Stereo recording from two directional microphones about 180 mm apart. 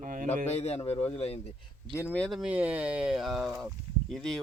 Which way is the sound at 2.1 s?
Centre (ahead or behind).